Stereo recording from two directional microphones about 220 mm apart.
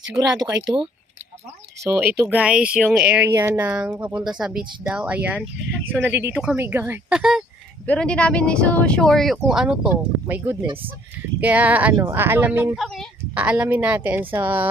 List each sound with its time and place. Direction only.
0.2 s speech: 15° right (ahead or behind)
1.8 s speech: 10° right (ahead or behind)